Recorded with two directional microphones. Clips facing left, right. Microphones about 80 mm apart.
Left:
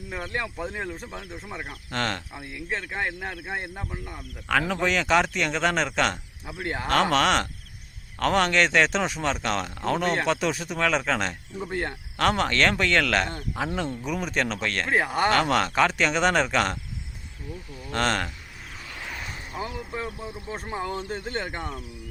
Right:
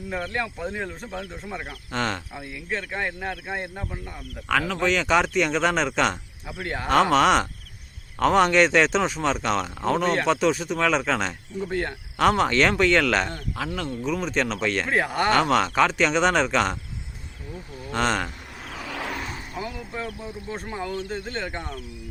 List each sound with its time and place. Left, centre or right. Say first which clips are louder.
0.2 s speech: even; centre
2.6 s speech: right 1 dB; centre
11.7 s speech: right 2 dB; left
12.1 s speech: right 4 dB; centre
13.7 s speech: right 1 dB; centre
17.9 s speech: right 1 dB; centre
18.8 s a sound: right 8 dB; right
19.5 s a sound: left 1 dB; left
20.5 s speech: even; left